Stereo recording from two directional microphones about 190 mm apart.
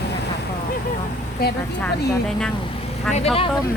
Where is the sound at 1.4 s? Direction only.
55° left (ahead or behind).